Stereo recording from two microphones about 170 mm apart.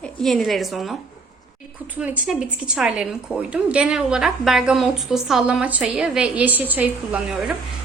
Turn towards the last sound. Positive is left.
turn(degrees=-10)  # may be behind; listen again after turning